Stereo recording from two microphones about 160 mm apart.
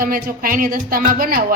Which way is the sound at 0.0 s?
65° right (ahead or behind).